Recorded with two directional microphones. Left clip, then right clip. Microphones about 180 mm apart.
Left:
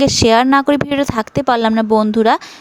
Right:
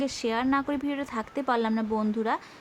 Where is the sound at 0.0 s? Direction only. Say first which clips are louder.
Left 17 dB; 50° left (ahead or behind).